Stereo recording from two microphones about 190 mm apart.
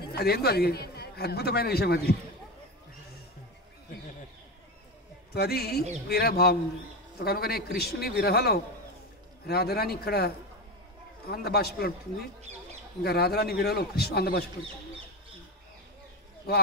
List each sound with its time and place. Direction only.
0.1 s a man's voice: 55° left (ahead or behind)
5.3 s a man's voice: 55° left (ahead or behind)